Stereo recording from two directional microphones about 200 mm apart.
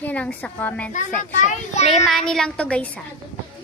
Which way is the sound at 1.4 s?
35° left (ahead or behind).